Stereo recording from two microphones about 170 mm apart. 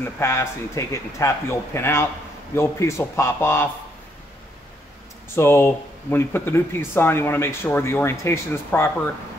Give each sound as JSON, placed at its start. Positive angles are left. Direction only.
{"t": 0.2, "sound": "speech", "side_deg": 15}
{"t": 5.3, "sound": "speech", "side_deg": 15}